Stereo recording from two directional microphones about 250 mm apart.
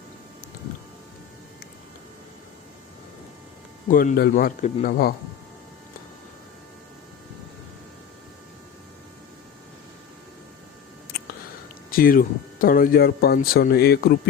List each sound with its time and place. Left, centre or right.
3.8 s speech: left
11.9 s speech: left